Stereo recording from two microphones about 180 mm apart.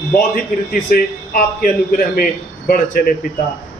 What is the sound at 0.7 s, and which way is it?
Speech, 50° left (ahead or behind).